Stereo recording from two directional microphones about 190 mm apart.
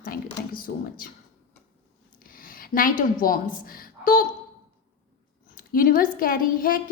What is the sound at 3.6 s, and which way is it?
Speech, 50° left (ahead or behind).